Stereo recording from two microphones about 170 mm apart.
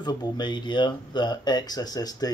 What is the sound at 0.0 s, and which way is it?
Speech, 25° left (ahead or behind).